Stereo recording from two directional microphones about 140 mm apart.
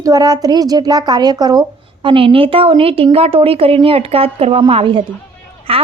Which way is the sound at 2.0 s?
40° right (ahead or behind).